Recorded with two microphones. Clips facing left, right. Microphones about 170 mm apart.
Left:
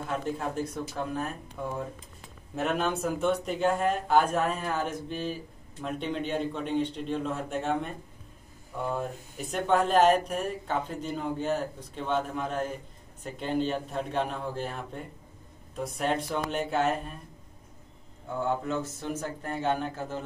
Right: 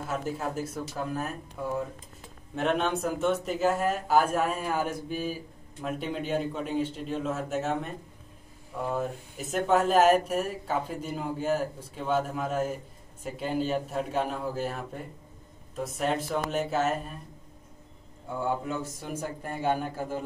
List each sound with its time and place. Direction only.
0.0 s speech: 5° right (ahead or behind)
18.4 s a man's voice: 10° right (ahead or behind)